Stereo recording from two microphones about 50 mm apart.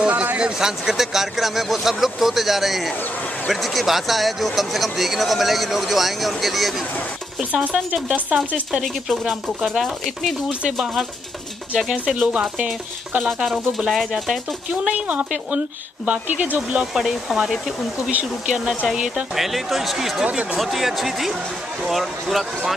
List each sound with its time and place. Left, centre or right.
0.1 s a sound: right
0.4 s speech: centre
7.6 s speech: right
9.2 s speech: centre
11.8 s speech: centre
12.2 s speech: centre
13.4 s speech: centre
14.9 s speech: right
16.9 s speech: centre
19.3 s speech: centre